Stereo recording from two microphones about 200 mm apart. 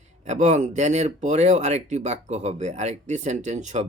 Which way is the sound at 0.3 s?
35° right (ahead or behind).